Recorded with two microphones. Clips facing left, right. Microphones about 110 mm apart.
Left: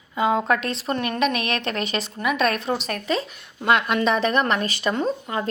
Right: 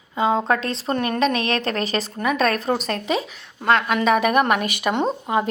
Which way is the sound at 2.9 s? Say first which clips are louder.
Right 2 dB; 20° right (ahead or behind).